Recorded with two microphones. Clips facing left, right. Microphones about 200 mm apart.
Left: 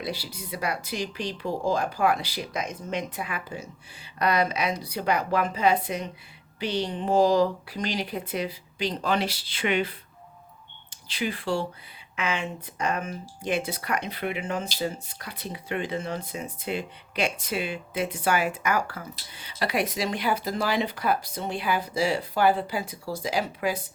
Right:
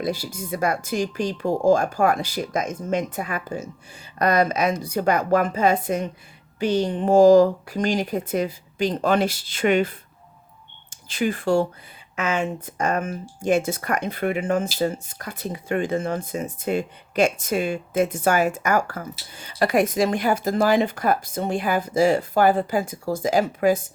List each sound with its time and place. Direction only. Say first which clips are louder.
0.0 s speech: right 7 dB; 45° right (ahead or behind)